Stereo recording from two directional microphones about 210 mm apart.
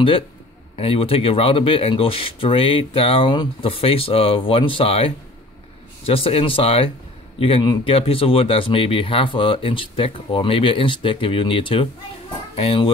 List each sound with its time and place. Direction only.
0.7 s speech: 25° left (ahead or behind)